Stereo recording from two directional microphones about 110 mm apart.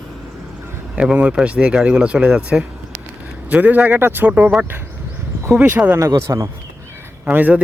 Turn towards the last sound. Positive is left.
turn(degrees=-15)  # may be behind; listen again after turning